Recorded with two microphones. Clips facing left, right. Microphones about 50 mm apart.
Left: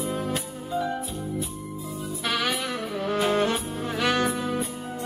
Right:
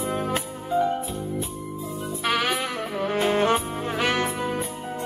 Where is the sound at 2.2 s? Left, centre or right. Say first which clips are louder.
Right 3 dB; right.